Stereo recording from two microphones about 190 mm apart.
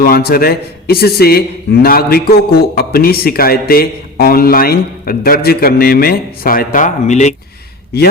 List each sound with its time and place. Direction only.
0.0 s a man's voice: 55° left (ahead or behind); by 7.3 s 40° left (ahead or behind)